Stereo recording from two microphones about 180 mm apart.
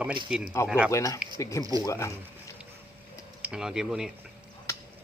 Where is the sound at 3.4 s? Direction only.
5° right (ahead or behind).